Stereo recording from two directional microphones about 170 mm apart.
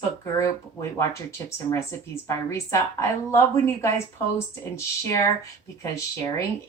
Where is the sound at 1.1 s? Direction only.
15° left (ahead or behind).